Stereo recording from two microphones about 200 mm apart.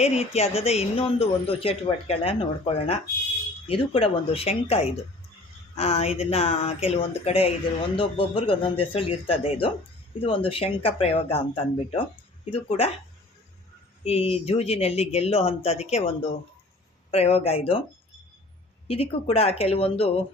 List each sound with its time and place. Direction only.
0.0 s a woman's voice: 30° left (ahead or behind)
14.0 s speech: 30° left (ahead or behind)
18.9 s a woman's voice: 30° left (ahead or behind)